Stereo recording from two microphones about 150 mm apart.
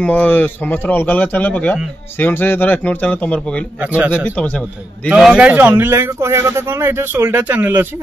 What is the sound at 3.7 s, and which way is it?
Speech, 10° right (ahead or behind).